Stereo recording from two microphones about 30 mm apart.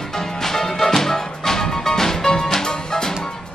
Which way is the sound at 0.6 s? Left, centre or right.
Centre.